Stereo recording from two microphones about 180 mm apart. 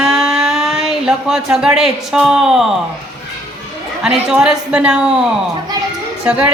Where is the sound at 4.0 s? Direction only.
5° right (ahead or behind).